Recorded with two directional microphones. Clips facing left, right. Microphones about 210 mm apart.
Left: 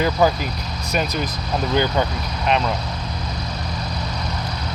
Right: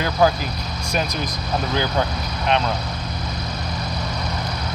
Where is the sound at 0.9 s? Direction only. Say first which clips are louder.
Left 2 dB; 5° left (ahead or behind).